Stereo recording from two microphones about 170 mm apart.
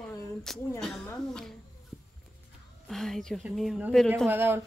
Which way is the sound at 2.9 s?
Centre (ahead or behind).